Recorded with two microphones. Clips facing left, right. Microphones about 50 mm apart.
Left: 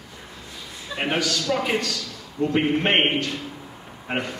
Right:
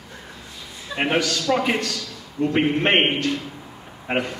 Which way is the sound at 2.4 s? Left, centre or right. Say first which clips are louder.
Right 1 dB; centre.